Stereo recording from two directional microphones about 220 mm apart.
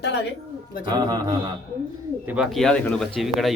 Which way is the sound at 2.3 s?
Centre (ahead or behind).